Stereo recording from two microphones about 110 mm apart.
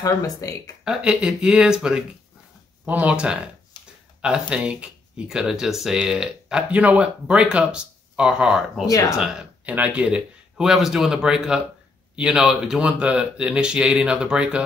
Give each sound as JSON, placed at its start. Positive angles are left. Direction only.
{"t": 0.0, "sound": "speech", "side_deg": 30}
{"t": 0.8, "sound": "speech", "side_deg": -5}
{"t": 3.8, "sound": "a sound", "side_deg": 40}
{"t": 4.2, "sound": "speech", "side_deg": -10}